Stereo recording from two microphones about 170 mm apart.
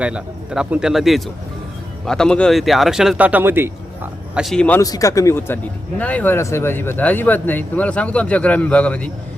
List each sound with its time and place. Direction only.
0.0 s speech: 5° right (ahead or behind)
4.4 s speech: centre (ahead or behind)
4.8 s speech: 20° left (ahead or behind)